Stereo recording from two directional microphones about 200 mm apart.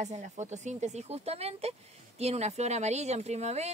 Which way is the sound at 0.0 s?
35° right (ahead or behind).